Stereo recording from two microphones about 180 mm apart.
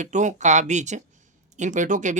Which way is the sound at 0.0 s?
45° right (ahead or behind).